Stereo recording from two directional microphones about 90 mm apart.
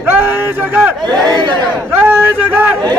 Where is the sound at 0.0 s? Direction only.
25° right (ahead or behind).